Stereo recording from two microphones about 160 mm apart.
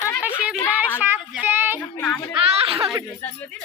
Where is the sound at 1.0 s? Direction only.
10° right (ahead or behind).